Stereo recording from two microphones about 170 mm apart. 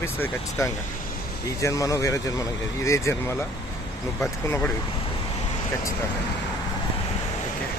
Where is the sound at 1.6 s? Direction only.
20° left (ahead or behind).